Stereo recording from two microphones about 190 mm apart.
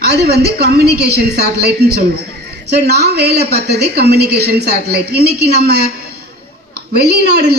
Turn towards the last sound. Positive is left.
turn(degrees=-60)  # may be behind; listen again after turning